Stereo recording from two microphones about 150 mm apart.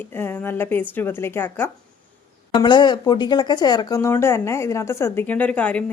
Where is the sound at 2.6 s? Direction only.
30° left (ahead or behind).